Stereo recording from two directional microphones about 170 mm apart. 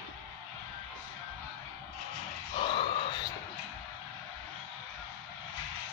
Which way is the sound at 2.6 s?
30° left (ahead or behind).